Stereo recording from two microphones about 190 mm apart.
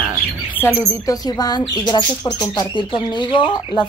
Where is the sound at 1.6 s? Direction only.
10° left (ahead or behind).